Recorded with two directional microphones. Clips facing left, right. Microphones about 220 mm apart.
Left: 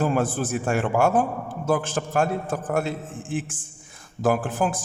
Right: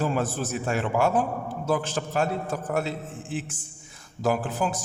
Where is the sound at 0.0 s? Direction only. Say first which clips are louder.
Left 3 dB; 50° left (ahead or behind).